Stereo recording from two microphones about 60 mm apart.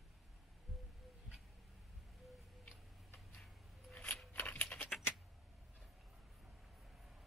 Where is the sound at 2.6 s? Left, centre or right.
Centre.